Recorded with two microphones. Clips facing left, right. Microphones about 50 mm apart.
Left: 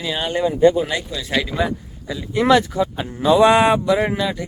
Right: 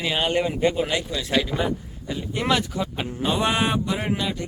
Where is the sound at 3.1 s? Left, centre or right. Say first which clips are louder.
Left 10 dB; left.